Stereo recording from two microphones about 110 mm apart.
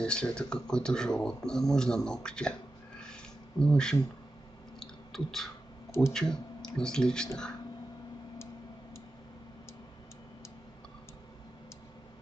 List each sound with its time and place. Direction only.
0.0 s speech: 10° left (ahead or behind)
3.0 s a sound: 5° left (ahead or behind)
4.7 s clicking: 5° left (ahead or behind)
6.1 s speech: 5° left (ahead or behind)